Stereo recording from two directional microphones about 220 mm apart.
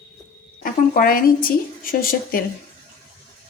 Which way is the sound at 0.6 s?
40° left (ahead or behind).